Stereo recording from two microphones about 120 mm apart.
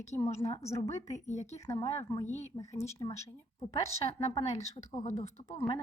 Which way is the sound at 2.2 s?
70° left (ahead or behind).